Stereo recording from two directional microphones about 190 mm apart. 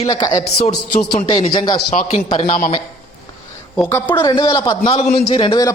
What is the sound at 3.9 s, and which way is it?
Speech, 15° left (ahead or behind).